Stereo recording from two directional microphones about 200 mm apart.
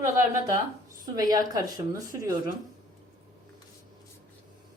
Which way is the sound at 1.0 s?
20° right (ahead or behind).